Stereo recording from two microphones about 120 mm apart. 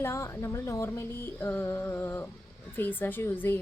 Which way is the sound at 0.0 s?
20° left (ahead or behind).